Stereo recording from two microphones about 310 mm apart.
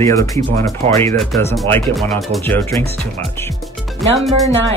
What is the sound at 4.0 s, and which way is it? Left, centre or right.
Speech, centre.